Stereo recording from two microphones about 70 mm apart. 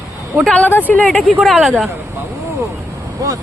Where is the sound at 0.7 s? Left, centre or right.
Left.